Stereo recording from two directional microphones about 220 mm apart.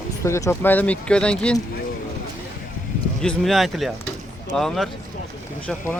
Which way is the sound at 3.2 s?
Centre (ahead or behind).